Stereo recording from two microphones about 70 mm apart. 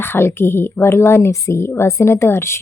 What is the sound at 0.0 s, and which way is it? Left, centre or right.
Speech, left.